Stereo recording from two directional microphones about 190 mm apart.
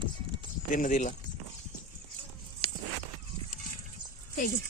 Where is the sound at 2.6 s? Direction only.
30° left (ahead or behind).